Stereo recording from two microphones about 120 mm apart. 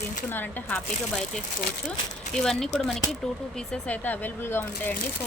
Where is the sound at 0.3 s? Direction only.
15° left (ahead or behind).